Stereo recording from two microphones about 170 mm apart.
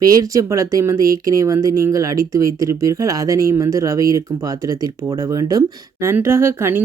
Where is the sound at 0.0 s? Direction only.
20° right (ahead or behind).